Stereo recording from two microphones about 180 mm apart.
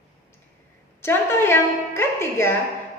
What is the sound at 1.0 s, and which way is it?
A woman's voice, 15° left (ahead or behind).